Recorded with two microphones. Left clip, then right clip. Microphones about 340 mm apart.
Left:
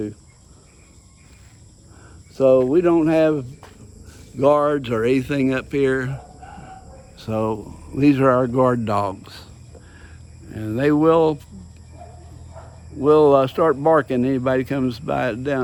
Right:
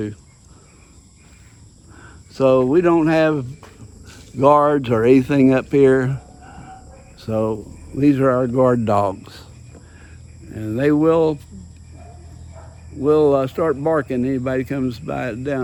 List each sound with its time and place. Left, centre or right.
2.0 s speech: right; by 9.5 s centre
10.5 s speech: centre
13.0 s speech: centre